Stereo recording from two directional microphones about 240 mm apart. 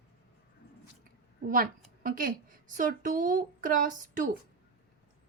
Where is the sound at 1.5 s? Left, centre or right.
Right.